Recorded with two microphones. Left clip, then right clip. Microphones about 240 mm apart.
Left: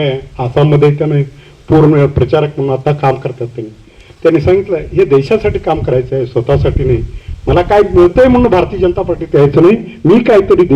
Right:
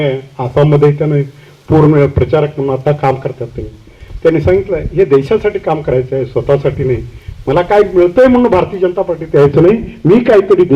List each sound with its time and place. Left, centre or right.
0.0 s a man's voice: left